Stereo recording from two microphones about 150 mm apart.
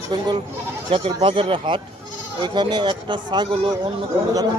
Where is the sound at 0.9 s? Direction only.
35° right (ahead or behind).